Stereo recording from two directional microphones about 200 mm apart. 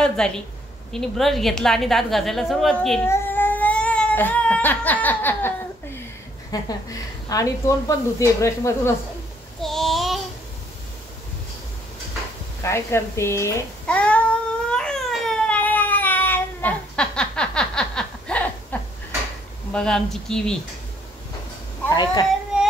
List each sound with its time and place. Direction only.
0.2 s a woman's voice: centre (ahead or behind)
3.1 s baby cry: 10° left (ahead or behind)
6.5 s a woman's voice: 20° left (ahead or behind)
9.6 s child singing: centre (ahead or behind)
12.6 s child singing: 15° left (ahead or behind)
19.7 s a woman's voice: 5° left (ahead or behind)
21.8 s speech: 20° left (ahead or behind)